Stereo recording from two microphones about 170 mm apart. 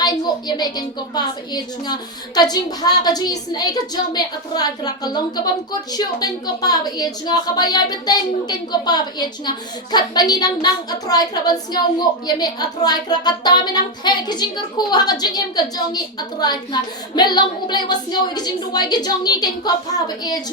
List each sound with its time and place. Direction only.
0.0 s a woman's voice: 25° left (ahead or behind)
17.2 s a woman's voice: 25° left (ahead or behind)